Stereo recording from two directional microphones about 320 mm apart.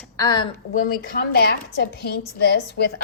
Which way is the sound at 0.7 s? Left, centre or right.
Left.